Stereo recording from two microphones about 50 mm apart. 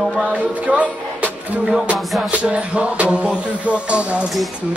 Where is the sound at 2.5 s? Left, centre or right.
Right.